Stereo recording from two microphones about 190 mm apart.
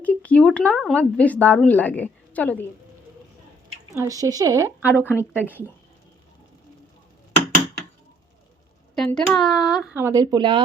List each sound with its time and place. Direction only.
0.0 s a woman's voice: 5° left (ahead or behind)
3.9 s a woman's voice: 15° right (ahead or behind)
5.0 s a woman's voice: 10° left (ahead or behind)
5.4 s a woman's voice: 10° right (ahead or behind)
9.0 s speech: 5° left (ahead or behind); by 10.6 s 25° right (ahead or behind)